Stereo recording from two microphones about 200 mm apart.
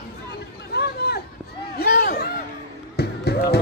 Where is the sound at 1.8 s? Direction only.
50° left (ahead or behind).